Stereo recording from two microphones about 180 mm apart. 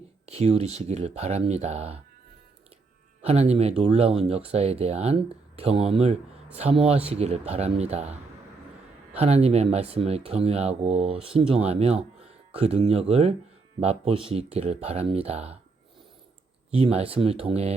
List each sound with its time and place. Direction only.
0.3 s speech: 35° right (ahead or behind)
3.2 s speech: 35° right (ahead or behind)
9.1 s speech: 35° right (ahead or behind)
16.7 s speech: 35° right (ahead or behind)